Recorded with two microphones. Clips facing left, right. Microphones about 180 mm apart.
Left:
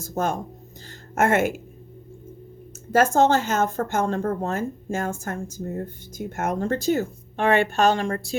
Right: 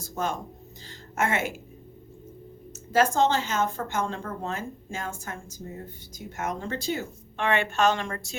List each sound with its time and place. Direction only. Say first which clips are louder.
0.0 s a woman's voice: left 5 dB; 45° left (ahead or behind)
2.9 s a woman's voice: left 4 dB; 50° left (ahead or behind)